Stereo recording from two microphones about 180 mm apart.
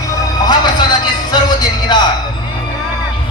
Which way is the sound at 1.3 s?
20° left (ahead or behind).